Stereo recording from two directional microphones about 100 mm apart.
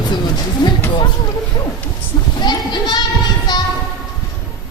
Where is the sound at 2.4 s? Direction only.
45° left (ahead or behind).